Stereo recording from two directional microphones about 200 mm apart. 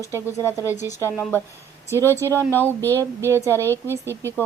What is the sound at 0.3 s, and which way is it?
Speech, 15° left (ahead or behind).